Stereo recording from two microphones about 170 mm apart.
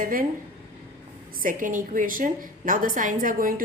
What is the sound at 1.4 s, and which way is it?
A woman's voice, 50° right (ahead or behind).